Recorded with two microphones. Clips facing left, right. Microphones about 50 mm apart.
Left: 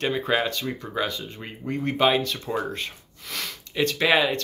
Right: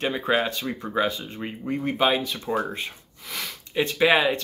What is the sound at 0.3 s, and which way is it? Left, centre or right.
Speech, centre.